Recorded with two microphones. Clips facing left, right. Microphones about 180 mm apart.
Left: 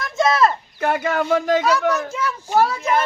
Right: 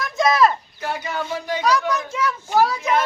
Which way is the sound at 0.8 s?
55° left (ahead or behind).